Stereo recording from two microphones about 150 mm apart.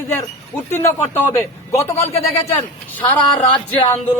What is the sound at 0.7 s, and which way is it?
A man's voice, 15° left (ahead or behind).